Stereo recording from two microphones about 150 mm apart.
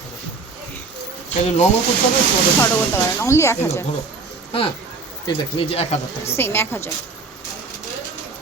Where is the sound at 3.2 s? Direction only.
20° left (ahead or behind).